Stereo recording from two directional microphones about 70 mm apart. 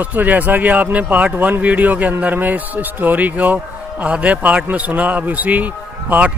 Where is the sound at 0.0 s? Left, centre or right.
Right.